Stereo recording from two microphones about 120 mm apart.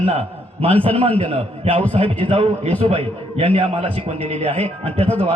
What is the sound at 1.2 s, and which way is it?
A man's voice, 55° right (ahead or behind).